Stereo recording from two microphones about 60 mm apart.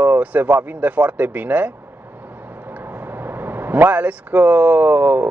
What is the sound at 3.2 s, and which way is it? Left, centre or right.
Speech, right.